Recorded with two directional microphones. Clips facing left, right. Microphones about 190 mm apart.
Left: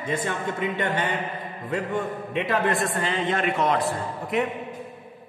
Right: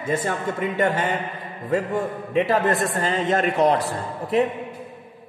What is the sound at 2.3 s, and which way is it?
Speech, 40° right (ahead or behind).